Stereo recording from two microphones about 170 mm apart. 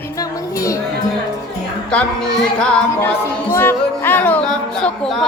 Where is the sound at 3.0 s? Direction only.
15° left (ahead or behind).